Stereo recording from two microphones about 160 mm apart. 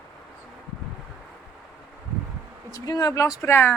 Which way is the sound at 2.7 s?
25° left (ahead or behind).